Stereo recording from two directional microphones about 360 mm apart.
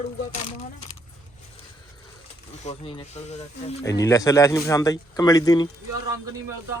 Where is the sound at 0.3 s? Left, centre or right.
Centre.